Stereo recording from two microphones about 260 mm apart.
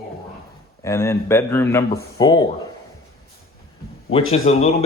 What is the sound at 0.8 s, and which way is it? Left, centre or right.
A man's voice, centre.